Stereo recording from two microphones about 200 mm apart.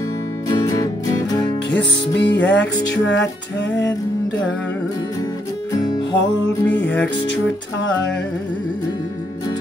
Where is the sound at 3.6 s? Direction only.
65° left (ahead or behind).